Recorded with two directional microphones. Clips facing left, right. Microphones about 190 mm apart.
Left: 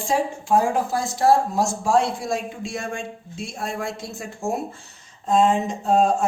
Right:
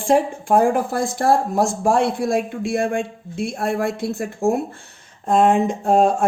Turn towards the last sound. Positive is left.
turn(degrees=-55)  # may be behind; listen again after turning